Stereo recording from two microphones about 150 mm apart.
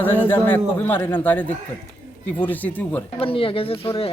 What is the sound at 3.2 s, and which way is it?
Speech, 35° left (ahead or behind).